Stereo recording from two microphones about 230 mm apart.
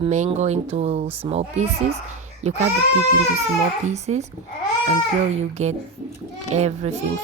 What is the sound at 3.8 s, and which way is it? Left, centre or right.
Speech, right.